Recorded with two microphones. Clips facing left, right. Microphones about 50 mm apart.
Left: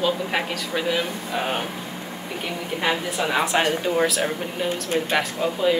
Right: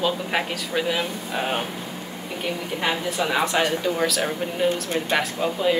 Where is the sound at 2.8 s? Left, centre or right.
Centre.